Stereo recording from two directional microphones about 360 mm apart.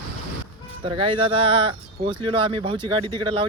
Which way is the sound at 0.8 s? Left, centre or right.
Centre.